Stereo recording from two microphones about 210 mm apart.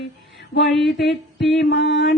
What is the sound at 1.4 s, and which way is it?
Mantra, 55° left (ahead or behind).